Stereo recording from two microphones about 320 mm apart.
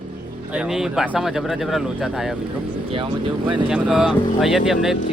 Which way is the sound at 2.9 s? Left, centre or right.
Centre.